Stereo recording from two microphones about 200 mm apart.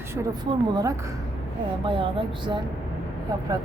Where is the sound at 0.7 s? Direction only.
20° right (ahead or behind).